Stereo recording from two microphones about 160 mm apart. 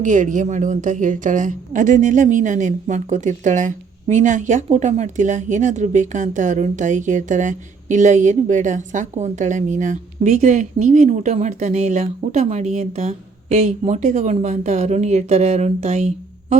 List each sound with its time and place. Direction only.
0.0 s speech: 50° right (ahead or behind)